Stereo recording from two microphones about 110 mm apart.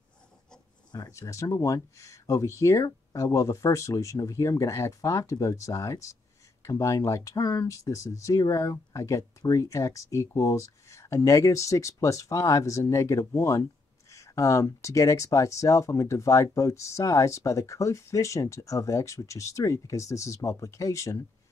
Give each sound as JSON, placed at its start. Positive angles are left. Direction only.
{"t": 0.9, "sound": "speech", "side_deg": 35}